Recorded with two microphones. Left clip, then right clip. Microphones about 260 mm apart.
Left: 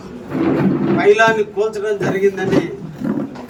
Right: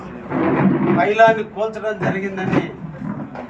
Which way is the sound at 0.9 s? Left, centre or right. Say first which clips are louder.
Left 1 dB; centre.